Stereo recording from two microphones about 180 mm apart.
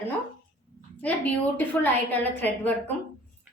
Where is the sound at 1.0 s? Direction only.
10° left (ahead or behind).